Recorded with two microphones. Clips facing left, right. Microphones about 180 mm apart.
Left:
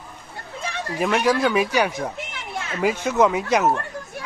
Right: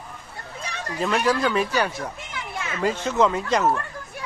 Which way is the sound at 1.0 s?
10° left (ahead or behind).